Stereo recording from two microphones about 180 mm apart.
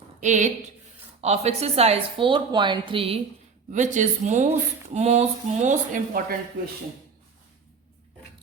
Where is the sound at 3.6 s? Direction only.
40° right (ahead or behind).